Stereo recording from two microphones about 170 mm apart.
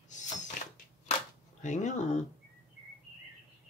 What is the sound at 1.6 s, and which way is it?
Speech, 45° left (ahead or behind).